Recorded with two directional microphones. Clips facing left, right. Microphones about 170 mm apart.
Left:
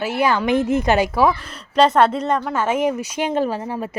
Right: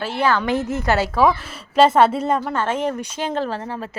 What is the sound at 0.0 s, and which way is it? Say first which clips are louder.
A woman's voice: left 1 dB; 10° left (ahead or behind).